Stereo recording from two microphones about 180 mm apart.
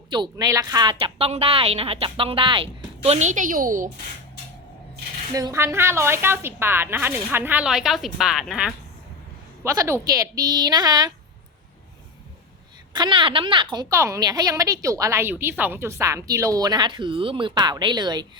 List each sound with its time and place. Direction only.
0.1 s a woman's voice: 20° right (ahead or behind); by 3.8 s 50° right (ahead or behind)
5.3 s a woman's voice: 20° right (ahead or behind)
9.6 s a woman's voice: 15° right (ahead or behind)
12.9 s a woman's voice: 25° right (ahead or behind)
13.9 s a woman's voice: 15° right (ahead or behind)